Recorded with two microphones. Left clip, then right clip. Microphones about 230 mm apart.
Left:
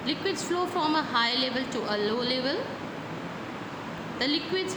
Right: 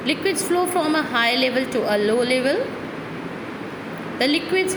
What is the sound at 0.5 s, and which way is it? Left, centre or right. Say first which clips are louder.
A woman's voice: right 6 dB; right.